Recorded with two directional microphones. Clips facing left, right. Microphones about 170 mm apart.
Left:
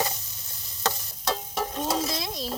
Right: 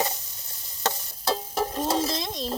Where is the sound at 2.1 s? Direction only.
5° left (ahead or behind).